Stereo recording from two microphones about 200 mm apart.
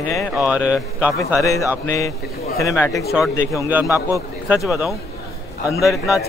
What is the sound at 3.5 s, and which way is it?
A man's voice, 10° right (ahead or behind).